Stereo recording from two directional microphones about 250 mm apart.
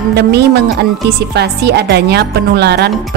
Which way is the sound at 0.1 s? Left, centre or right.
Right.